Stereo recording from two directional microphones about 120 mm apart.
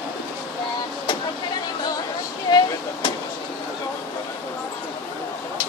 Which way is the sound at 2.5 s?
40° left (ahead or behind).